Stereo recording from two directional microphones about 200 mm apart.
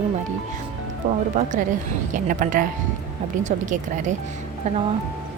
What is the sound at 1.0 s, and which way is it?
Speech, 40° right (ahead or behind).